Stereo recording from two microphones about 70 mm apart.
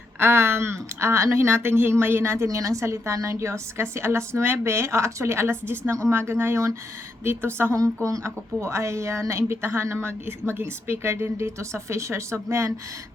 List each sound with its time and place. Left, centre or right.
0.2 s speech: right
7.3 s speech: right
8.0 s a woman's voice: right